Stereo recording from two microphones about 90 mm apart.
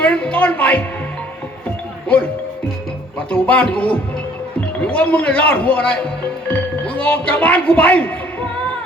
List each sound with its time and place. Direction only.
0.0 s speech: 15° left (ahead or behind)
3.2 s speech: 15° left (ahead or behind)